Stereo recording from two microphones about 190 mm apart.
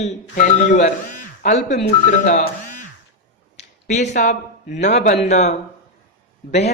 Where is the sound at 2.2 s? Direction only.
40° left (ahead or behind).